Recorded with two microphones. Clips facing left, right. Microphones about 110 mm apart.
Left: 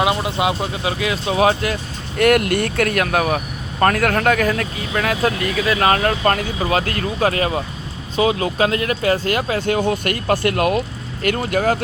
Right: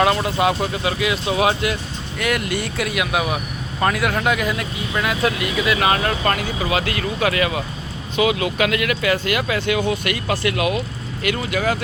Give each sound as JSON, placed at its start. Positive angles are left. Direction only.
{"t": 0.0, "sound": "speech", "side_deg": 15}
{"t": 0.9, "sound": "speech", "side_deg": 35}
{"t": 2.1, "sound": "speech", "side_deg": 55}